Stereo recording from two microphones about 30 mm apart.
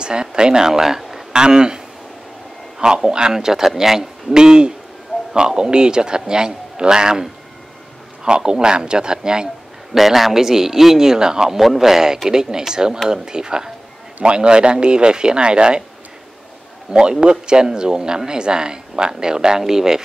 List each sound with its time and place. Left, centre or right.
0.0 s a man's voice: right
0.7 s speech: centre
1.3 s speech: right
2.8 s a man's voice: right
3.3 s a man's voice: centre
4.3 s a man's voice: right
9.9 s a man's voice: centre; by 11.5 s right
11.5 s a man's voice: centre; by 15.8 s right
16.9 s a man's voice: right